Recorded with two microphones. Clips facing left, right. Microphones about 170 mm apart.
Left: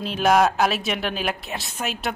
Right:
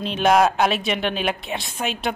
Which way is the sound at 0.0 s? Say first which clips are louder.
Right 1 dB; centre (ahead or behind).